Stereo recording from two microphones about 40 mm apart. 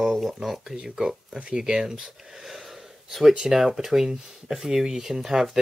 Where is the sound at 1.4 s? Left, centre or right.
Right; by 3.3 s centre.